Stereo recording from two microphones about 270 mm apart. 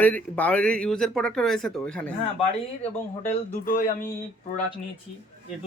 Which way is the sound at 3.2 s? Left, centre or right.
Left.